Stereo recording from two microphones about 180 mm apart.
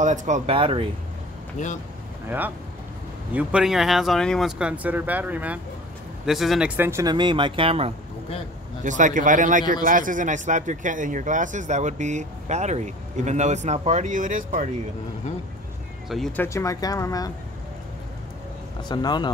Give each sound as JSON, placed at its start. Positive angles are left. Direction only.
{"t": 0.0, "sound": "speech", "side_deg": -45}
{"t": 2.2, "sound": "speech", "side_deg": -10}
{"t": 6.8, "sound": "speech", "side_deg": -15}
{"t": 8.8, "sound": "speech", "side_deg": -45}
{"t": 16.1, "sound": "speech", "side_deg": 0}
{"t": 16.4, "sound": "speech", "side_deg": 15}
{"t": 18.9, "sound": "speech", "side_deg": 25}